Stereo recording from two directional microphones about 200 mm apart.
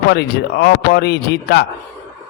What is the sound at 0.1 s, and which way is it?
A man's voice, 55° left (ahead or behind).